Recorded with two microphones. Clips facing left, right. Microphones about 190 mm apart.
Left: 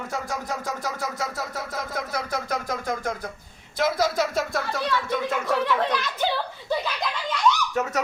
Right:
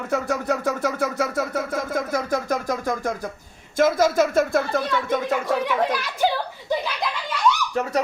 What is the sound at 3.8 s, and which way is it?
Speech, 50° right (ahead or behind).